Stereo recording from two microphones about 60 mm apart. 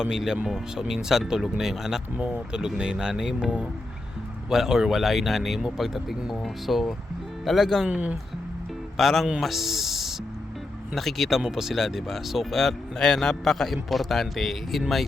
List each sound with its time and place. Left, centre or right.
0.0 s speech: centre
2.1 s speech: centre
7.9 s speech: centre
9.0 s speech: centre